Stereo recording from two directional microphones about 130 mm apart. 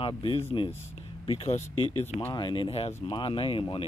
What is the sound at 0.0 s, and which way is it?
Speech, 45° left (ahead or behind).